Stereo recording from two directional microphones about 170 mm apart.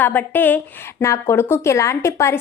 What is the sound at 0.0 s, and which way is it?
A woman's voice, 10° left (ahead or behind).